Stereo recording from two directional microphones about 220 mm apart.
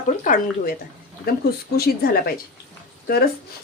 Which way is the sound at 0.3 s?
40° left (ahead or behind).